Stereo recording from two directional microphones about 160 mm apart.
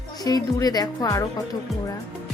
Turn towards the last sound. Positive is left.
turn(degrees=20)  # may be behind; listen again after turning